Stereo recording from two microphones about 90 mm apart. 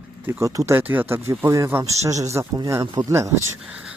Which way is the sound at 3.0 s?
45° right (ahead or behind).